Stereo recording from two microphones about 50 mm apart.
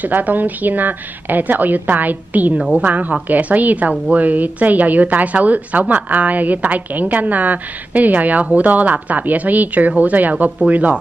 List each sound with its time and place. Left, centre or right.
0.0 s a woman's voice: right
10.3 s speech: centre